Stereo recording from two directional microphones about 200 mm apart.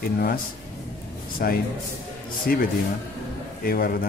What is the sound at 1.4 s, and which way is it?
A man's voice, 45° left (ahead or behind).